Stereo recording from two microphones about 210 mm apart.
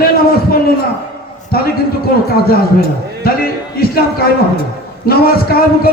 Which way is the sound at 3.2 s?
45° left (ahead or behind).